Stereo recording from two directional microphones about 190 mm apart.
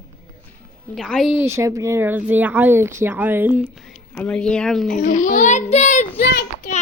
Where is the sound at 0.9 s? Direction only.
Centre (ahead or behind).